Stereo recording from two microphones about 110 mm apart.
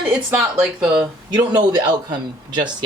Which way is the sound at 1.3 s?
40° right (ahead or behind).